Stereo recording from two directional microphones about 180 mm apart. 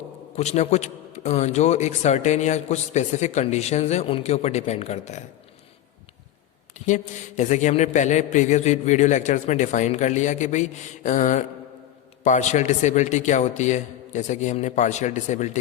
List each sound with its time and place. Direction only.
0.3 s a man's voice: 40° left (ahead or behind)
6.7 s a man's voice: 45° left (ahead or behind)